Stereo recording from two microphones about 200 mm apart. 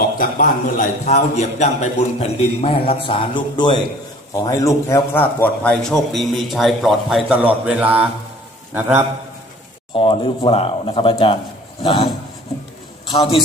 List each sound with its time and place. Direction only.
0.2 s a man's voice: 40° left (ahead or behind); by 8.0 s 5° right (ahead or behind)
9.9 s a man's voice: 25° left (ahead or behind)